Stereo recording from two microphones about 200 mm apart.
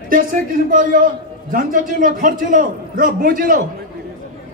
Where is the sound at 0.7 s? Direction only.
45° right (ahead or behind).